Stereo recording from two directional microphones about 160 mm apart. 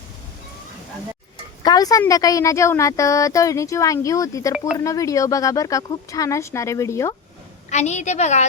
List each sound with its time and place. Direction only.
1.6 s a woman's voice: 25° left (ahead or behind)
7.7 s a woman's voice: 45° left (ahead or behind)